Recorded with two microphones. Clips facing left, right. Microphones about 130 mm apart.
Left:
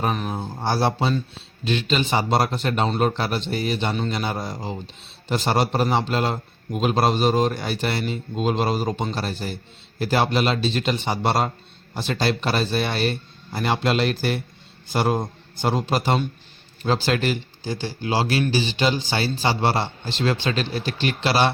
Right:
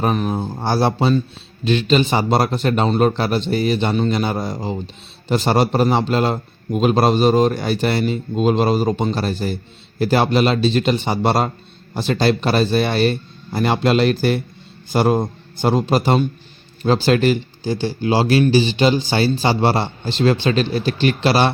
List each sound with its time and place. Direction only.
0.0 s a man's voice: 40° right (ahead or behind)